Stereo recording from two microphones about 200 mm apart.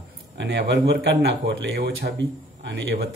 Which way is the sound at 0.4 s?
55° right (ahead or behind).